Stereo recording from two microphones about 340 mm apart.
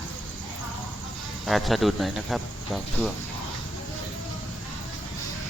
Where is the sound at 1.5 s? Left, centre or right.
Centre.